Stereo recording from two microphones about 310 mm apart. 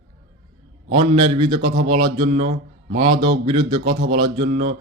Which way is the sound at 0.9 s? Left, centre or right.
Centre.